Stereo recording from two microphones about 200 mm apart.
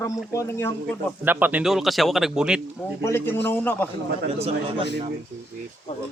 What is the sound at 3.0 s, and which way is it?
Speech, 15° left (ahead or behind).